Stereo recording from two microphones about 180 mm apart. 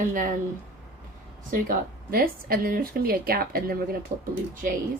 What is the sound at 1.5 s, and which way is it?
Speech, 55° right (ahead or behind).